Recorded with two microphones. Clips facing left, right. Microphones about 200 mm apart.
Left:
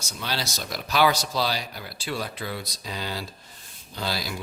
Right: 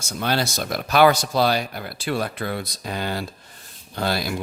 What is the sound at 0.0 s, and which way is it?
Speech, 55° right (ahead or behind).